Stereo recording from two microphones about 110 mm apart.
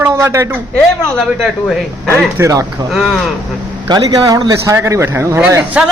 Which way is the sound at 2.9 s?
Centre (ahead or behind).